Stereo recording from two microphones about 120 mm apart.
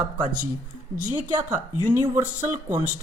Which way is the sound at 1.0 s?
90° right.